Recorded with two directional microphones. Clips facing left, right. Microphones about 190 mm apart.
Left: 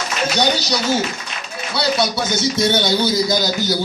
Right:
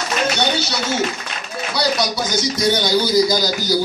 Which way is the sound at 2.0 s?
25° left (ahead or behind).